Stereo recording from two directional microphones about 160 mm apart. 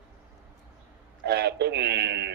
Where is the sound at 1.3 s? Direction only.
90° right.